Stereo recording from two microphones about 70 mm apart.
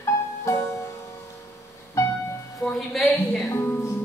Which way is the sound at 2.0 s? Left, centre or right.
Left.